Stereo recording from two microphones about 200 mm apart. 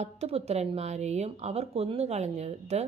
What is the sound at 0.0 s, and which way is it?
Speech, 30° right (ahead or behind).